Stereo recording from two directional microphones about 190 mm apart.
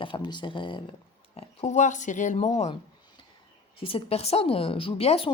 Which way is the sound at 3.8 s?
30° left (ahead or behind).